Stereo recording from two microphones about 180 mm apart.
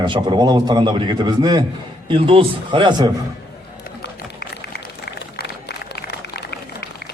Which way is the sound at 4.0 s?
60° left (ahead or behind).